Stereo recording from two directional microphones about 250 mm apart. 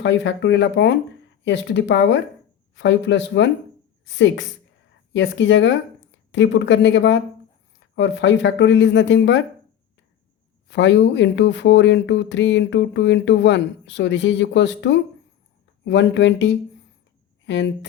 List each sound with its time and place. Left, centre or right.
0.0 s speech: left
10.7 s speech: left
17.4 s a sound: left